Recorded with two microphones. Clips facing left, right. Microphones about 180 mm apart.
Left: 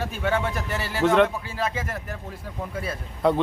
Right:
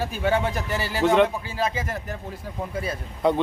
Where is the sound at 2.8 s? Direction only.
Centre (ahead or behind).